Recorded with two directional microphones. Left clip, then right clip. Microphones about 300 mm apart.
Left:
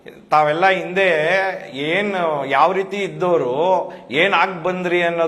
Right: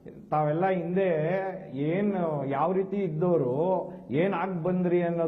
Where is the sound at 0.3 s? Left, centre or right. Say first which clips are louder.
Left 11 dB; centre.